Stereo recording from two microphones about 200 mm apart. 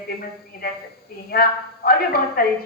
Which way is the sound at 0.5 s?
50° left (ahead or behind).